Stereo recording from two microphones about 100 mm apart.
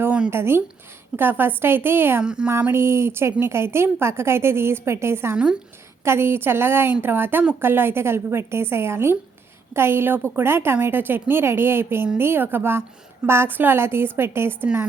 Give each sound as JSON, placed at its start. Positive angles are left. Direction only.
{"t": 0.0, "sound": "a sound", "side_deg": -10}
{"t": 0.3, "sound": "a woman's voice", "side_deg": -25}
{"t": 2.2, "sound": "a woman's voice", "side_deg": -10}
{"t": 2.5, "sound": "a woman's voice", "side_deg": -20}